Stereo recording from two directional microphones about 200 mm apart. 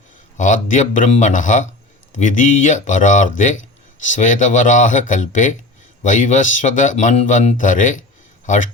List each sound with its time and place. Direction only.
0.3 s speech: 40° left (ahead or behind)